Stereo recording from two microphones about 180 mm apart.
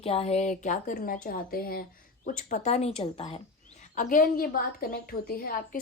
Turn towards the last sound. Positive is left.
turn(degrees=55)  # may be behind; listen again after turning